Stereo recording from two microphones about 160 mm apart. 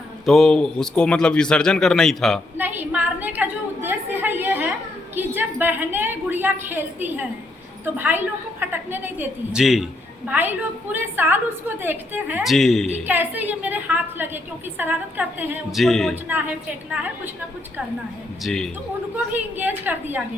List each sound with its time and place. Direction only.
0.3 s a man's voice: centre (ahead or behind)
2.6 s a woman's voice: 10° right (ahead or behind)
12.4 s a man's voice: centre (ahead or behind)
13.1 s a woman's voice: 10° right (ahead or behind)
15.7 s a man's voice: centre (ahead or behind)
18.4 s a man's voice: centre (ahead or behind)
19.1 s a woman's voice: 10° right (ahead or behind)